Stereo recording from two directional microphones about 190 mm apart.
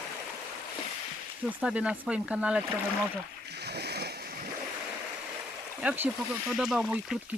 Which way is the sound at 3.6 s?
60° right (ahead or behind).